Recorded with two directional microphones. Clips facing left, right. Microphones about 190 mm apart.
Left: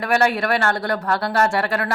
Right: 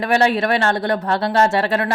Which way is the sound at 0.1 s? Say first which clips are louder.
Right 2 dB; 20° right (ahead or behind).